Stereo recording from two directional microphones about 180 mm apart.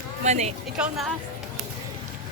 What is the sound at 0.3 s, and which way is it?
Speech, 40° right (ahead or behind).